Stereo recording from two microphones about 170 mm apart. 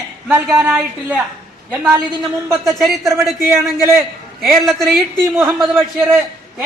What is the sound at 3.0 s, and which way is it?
Speech, 15° right (ahead or behind).